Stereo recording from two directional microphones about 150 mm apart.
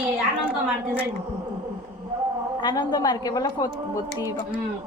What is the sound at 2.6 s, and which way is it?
A woman's voice, 30° left (ahead or behind).